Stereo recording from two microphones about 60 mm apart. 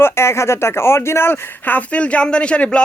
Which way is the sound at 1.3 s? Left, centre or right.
Left.